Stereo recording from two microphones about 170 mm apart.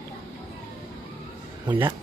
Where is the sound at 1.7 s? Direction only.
25° right (ahead or behind).